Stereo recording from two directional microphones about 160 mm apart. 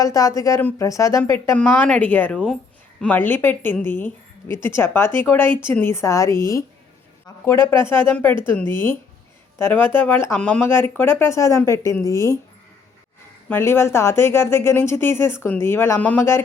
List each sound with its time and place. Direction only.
0.0 s speech: 20° left (ahead or behind)
13.5 s speech: 15° left (ahead or behind)